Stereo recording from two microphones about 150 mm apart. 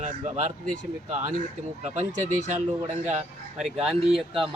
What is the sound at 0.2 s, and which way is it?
Speech, 60° right (ahead or behind).